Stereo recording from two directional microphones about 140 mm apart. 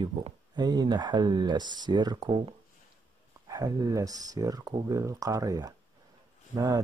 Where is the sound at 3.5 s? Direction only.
25° right (ahead or behind).